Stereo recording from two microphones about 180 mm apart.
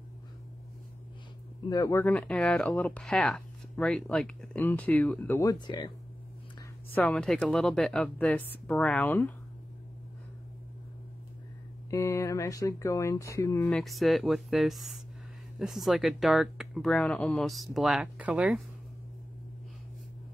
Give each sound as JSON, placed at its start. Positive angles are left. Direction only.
{"t": 1.7, "sound": "speech", "side_deg": 15}
{"t": 6.9, "sound": "speech", "side_deg": 5}
{"t": 11.9, "sound": "speech", "side_deg": 15}
{"t": 13.7, "sound": "speech", "side_deg": 0}